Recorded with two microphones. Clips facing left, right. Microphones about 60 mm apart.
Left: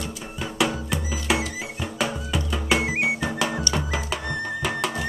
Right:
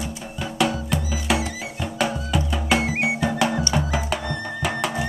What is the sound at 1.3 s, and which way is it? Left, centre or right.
Music, centre.